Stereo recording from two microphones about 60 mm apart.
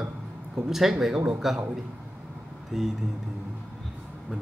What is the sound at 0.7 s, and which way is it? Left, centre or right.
Music, centre.